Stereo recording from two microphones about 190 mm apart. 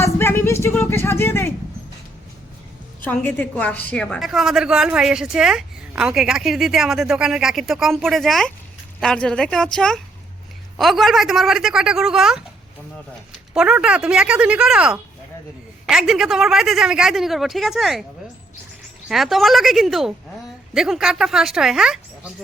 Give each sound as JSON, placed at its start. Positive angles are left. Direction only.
{"t": 0.0, "sound": "a sound", "side_deg": 15}
{"t": 3.0, "sound": "a woman's voice", "side_deg": 10}
{"t": 13.5, "sound": "a woman's voice", "side_deg": -5}
{"t": 19.0, "sound": "a woman's voice", "side_deg": 0}